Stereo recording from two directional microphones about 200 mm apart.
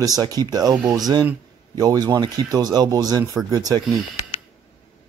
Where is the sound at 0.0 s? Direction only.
20° right (ahead or behind).